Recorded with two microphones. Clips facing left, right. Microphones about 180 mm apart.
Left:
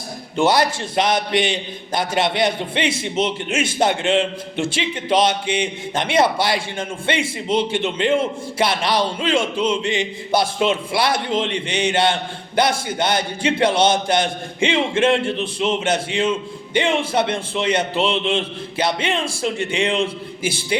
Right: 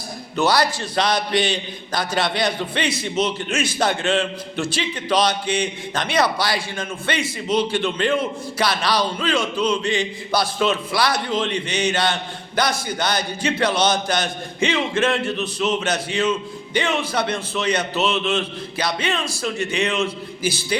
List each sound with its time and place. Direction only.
0.3 s a man's voice: 25° left (ahead or behind)